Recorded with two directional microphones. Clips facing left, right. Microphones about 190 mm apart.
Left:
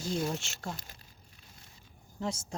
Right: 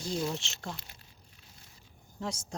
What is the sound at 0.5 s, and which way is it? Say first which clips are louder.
Speech: left 1 dB; 40° left (ahead or behind).